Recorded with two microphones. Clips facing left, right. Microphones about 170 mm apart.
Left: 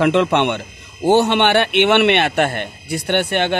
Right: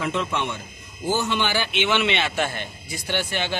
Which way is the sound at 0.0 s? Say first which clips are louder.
Left 11 dB; 70° left (ahead or behind).